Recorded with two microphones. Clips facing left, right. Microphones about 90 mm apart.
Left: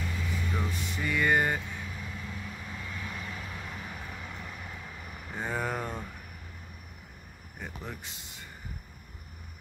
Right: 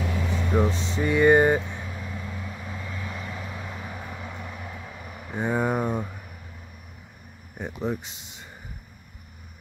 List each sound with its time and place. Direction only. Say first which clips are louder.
0.0 s vehicle: right 7 dB; 75° right (ahead or behind)
0.7 s vehicle: right 8 dB; 25° right (ahead or behind)
7.5 s speech: right 11 dB; 20° right (ahead or behind)